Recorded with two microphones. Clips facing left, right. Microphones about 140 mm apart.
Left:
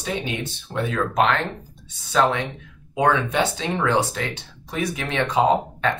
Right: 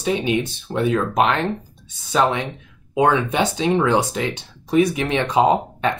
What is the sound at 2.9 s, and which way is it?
Speech, 20° right (ahead or behind).